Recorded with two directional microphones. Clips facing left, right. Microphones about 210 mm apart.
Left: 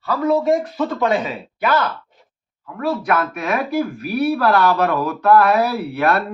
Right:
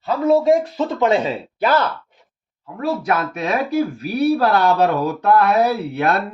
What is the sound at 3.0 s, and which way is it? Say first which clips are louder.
Speech: even; 25° right (ahead or behind).